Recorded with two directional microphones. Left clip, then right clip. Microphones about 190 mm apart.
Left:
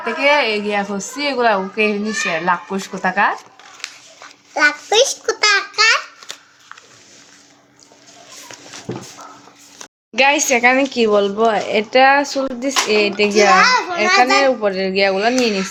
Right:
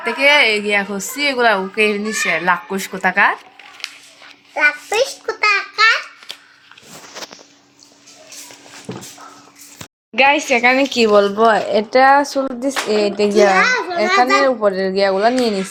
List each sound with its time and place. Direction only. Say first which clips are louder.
0.0 s a woman's voice: right 2 dB; 5° right (ahead or behind)
4.5 s a child's voice: left 2 dB; 40° left (ahead or behind)
5.4 s a sound: even; 40° left (ahead or behind)
5.7 s babbling: right 3 dB; 20° left (ahead or behind)
10.2 s speech: right 1 dB; 5° right (ahead or behind)
13.3 s a child's voice: left 2 dB; 10° left (ahead or behind)
14.4 s a woman's voice: right 1 dB; 5° right (ahead or behind)
15.4 s speech: even; 20° left (ahead or behind)